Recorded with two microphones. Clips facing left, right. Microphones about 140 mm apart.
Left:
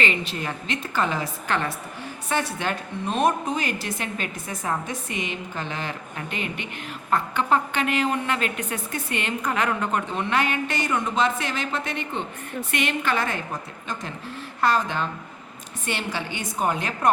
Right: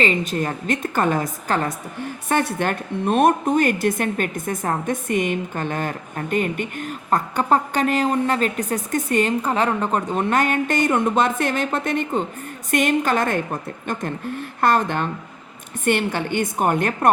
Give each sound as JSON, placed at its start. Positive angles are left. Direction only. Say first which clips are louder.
{"t": 0.0, "sound": "a woman's voice", "louder": "right 6 dB", "side_deg": -40}
{"t": 2.3, "sound": "a woman's voice", "louder": "right 5 dB", "side_deg": -55}